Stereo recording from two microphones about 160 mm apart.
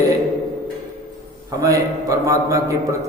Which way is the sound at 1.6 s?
20° right (ahead or behind).